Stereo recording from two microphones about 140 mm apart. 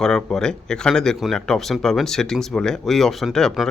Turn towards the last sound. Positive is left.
turn(degrees=5)  # may be behind; listen again after turning